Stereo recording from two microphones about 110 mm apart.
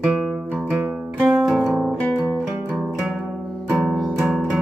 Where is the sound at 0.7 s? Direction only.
10° right (ahead or behind).